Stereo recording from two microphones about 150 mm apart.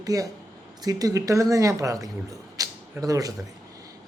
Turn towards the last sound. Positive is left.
turn(degrees=-25)  # may be behind; listen again after turning